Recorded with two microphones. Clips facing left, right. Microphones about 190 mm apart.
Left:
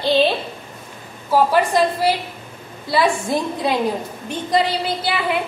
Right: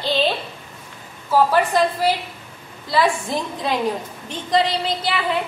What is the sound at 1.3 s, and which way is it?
A woman's voice, 10° left (ahead or behind).